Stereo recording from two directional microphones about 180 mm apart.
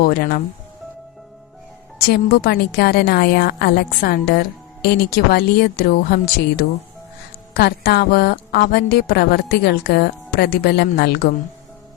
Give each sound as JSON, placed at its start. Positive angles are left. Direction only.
{"t": 0.0, "sound": "a woman's voice", "side_deg": 55}
{"t": 2.0, "sound": "a woman's voice", "side_deg": 60}